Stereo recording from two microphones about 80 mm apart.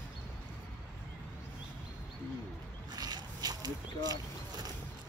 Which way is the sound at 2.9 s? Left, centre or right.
Right.